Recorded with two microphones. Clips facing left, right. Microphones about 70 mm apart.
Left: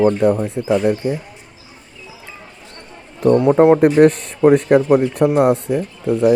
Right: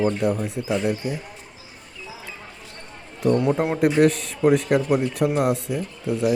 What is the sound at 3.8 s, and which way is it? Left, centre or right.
Speech, left.